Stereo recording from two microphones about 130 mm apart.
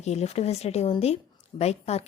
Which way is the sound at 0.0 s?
55° left (ahead or behind).